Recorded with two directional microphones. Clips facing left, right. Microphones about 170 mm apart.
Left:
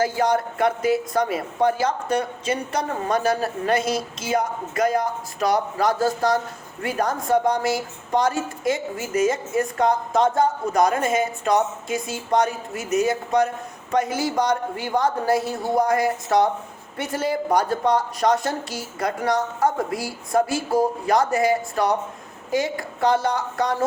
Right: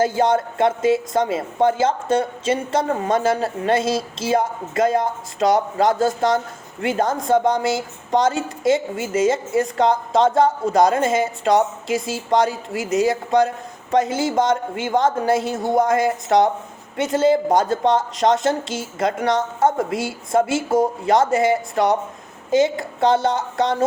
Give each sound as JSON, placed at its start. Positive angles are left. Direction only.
{"t": 0.0, "sound": "speech", "side_deg": -25}
{"t": 11.9, "sound": "speech", "side_deg": -90}
{"t": 13.9, "sound": "speech", "side_deg": -25}